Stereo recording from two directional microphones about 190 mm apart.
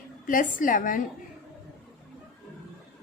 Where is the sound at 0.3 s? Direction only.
45° left (ahead or behind).